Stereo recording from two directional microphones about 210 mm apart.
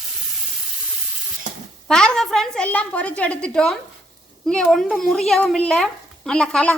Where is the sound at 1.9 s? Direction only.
5° left (ahead or behind).